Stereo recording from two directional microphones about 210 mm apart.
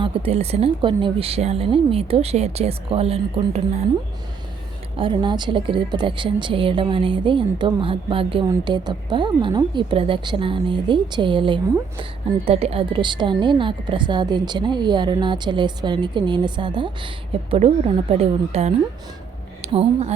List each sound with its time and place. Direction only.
0.0 s a woman's voice: 25° right (ahead or behind)
4.9 s a woman's voice: 25° right (ahead or behind)